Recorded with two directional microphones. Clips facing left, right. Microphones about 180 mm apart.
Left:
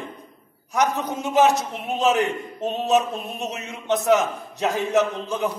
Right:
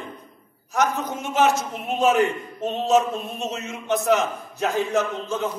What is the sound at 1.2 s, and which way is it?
Speech, 15° left (ahead or behind).